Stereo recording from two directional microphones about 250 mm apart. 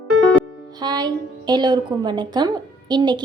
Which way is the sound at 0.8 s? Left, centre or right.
Centre.